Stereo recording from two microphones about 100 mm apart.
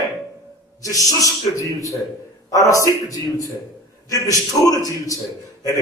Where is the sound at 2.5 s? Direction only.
35° left (ahead or behind).